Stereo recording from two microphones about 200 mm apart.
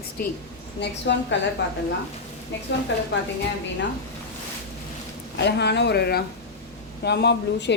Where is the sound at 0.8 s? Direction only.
60° left (ahead or behind).